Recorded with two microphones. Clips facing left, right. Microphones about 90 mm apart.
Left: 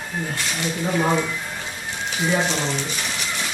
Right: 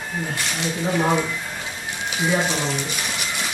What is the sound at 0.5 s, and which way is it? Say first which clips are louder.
Speech: even; 5° right (ahead or behind).